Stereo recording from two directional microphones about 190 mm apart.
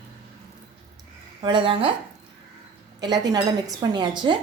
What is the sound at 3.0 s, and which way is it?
A woman's voice, 20° right (ahead or behind).